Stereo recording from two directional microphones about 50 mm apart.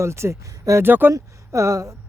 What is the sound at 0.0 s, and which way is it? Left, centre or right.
Speech, right.